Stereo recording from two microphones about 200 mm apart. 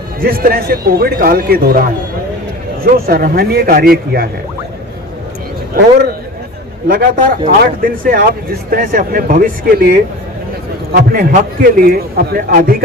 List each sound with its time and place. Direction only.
0.2 s speech: 45° right (ahead or behind)
2.9 s speech: 45° right (ahead or behind)
5.7 s speech: 45° right (ahead or behind)